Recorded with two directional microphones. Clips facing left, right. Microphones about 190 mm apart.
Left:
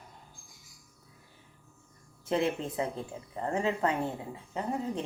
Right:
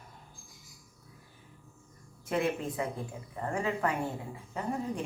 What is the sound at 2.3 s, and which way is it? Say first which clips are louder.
Speech: left 1 dB; 25° left (ahead or behind).